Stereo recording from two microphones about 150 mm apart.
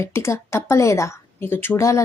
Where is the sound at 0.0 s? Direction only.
15° left (ahead or behind).